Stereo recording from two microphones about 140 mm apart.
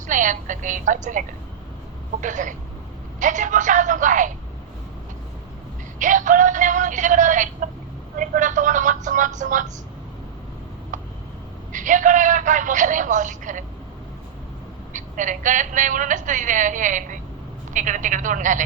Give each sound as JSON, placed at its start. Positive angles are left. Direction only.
{"t": 0.1, "sound": "a woman's voice", "side_deg": -65}
{"t": 2.2, "sound": "a woman's voice", "side_deg": -65}
{"t": 6.0, "sound": "a woman's voice", "side_deg": -65}
{"t": 11.7, "sound": "a woman's voice", "side_deg": -65}
{"t": 14.9, "sound": "a woman's voice", "side_deg": -65}